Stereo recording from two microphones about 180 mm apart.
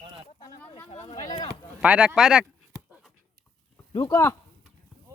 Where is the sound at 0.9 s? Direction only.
35° left (ahead or behind).